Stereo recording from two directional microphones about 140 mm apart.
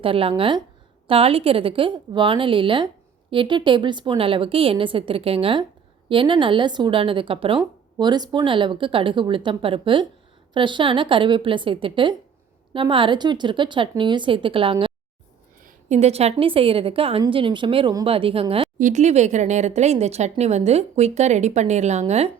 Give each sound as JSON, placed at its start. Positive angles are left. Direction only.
{"t": 0.0, "sound": "a woman's voice", "side_deg": -40}
{"t": 15.6, "sound": "a woman's voice", "side_deg": -55}
{"t": 18.8, "sound": "speech", "side_deg": -60}